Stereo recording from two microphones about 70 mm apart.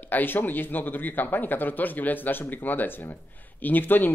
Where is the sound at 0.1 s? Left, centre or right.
Left.